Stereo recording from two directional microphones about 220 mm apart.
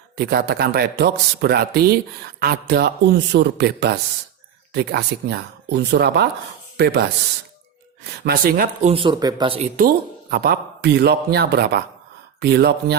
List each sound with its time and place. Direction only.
0.2 s speech: 45° right (ahead or behind)
8.2 s speech: 40° right (ahead or behind)
8.9 s speech: 20° right (ahead or behind)
9.7 s speech: 45° right (ahead or behind)